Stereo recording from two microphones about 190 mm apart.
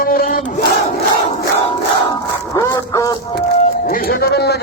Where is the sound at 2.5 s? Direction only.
15° left (ahead or behind).